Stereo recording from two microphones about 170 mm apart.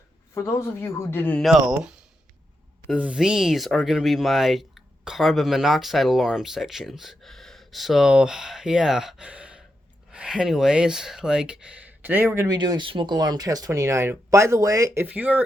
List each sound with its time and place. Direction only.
0.3 s speech: 15° left (ahead or behind)
1.4 s speech: centre (ahead or behind)
12.5 s speech: 25° right (ahead or behind); by 15.4 s 10° right (ahead or behind)